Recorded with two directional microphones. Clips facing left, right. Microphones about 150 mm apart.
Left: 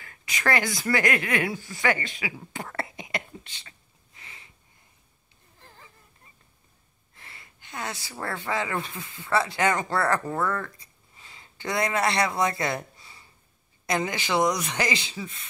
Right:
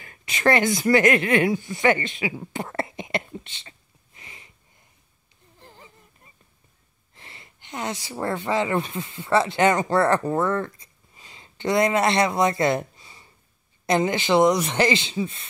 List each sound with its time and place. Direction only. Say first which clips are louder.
0.0 s a woman's voice: right 7 dB; 25° right (ahead or behind)
4.2 s sniff: right 2 dB; 20° right (ahead or behind)
5.6 s a sound: right 4 dB; 20° right (ahead or behind)
7.2 s a man's voice: right 2 dB; 25° right (ahead or behind)